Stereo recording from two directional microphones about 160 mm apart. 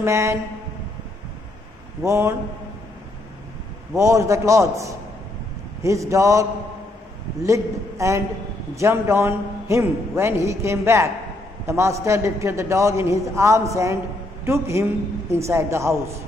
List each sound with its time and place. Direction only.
0.0 s a man's voice: 15° right (ahead or behind)
2.0 s a man's voice: 15° right (ahead or behind)
3.9 s a man's voice: 20° right (ahead or behind)
7.4 s a man's voice: 20° right (ahead or behind)